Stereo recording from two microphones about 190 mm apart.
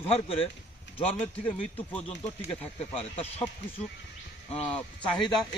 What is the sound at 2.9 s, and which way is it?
Speech, 30° left (ahead or behind).